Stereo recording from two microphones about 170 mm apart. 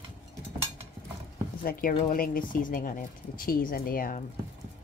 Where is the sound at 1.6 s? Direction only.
60° left (ahead or behind).